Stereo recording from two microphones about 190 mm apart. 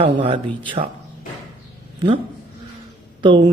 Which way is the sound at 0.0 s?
25° right (ahead or behind).